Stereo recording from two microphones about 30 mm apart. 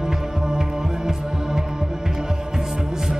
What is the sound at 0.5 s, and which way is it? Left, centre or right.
Hum, right.